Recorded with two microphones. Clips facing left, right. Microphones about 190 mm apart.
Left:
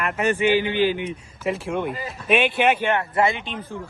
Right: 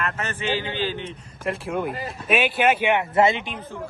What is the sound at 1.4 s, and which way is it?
A man's voice, centre (ahead or behind).